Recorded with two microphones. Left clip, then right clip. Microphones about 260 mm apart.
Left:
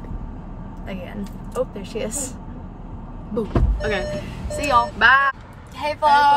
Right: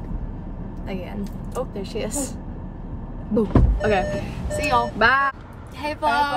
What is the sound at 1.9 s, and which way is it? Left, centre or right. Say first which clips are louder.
Speech: left 2 dB; left.